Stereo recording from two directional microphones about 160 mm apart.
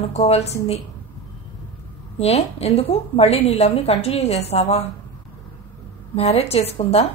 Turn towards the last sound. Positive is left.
turn(degrees=40)  # may be behind; listen again after turning